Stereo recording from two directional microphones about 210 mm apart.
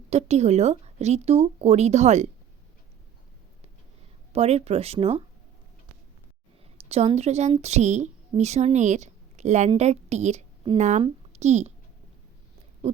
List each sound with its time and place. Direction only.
0.1 s speech: 30° right (ahead or behind)
4.3 s speech: 30° right (ahead or behind)
6.7 s a woman's voice: 30° right (ahead or behind)